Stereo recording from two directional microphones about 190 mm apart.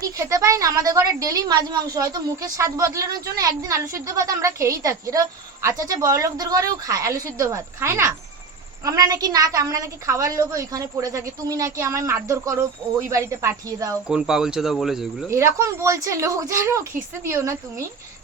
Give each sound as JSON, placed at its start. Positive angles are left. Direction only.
{"t": 0.0, "sound": "a woman's voice", "side_deg": -15}
{"t": 14.1, "sound": "speech", "side_deg": -5}
{"t": 15.3, "sound": "a woman's voice", "side_deg": -15}